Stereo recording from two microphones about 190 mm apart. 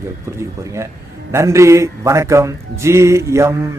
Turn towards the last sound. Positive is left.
turn(degrees=-15)  # may be behind; listen again after turning